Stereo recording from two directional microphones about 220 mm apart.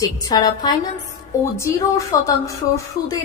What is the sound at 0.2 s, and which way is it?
A woman's voice, 15° left (ahead or behind).